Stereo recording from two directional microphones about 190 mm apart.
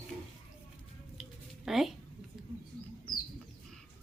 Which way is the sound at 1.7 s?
Centre (ahead or behind).